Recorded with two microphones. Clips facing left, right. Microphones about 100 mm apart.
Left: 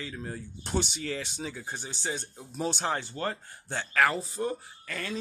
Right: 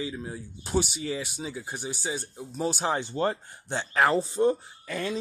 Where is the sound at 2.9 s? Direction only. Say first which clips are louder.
Right 5 dB; 20° right (ahead or behind).